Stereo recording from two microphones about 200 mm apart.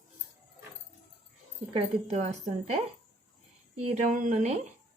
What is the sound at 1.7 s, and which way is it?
A woman's voice, 30° right (ahead or behind).